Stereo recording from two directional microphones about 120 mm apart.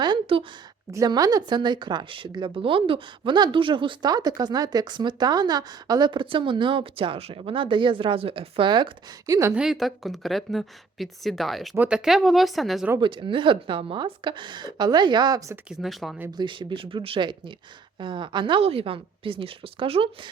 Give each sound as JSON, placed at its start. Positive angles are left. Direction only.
{"t": 0.0, "sound": "a sound", "side_deg": -45}
{"t": 0.9, "sound": "speech", "side_deg": -30}
{"t": 9.2, "sound": "a woman's voice", "side_deg": -30}
{"t": 9.6, "sound": "speech", "side_deg": 0}
{"t": 13.0, "sound": "speech", "side_deg": -40}
{"t": 15.7, "sound": "speech", "side_deg": 0}
{"t": 16.4, "sound": "speech", "side_deg": -40}